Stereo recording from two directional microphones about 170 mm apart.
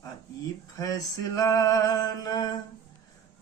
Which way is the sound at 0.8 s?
20° left (ahead or behind).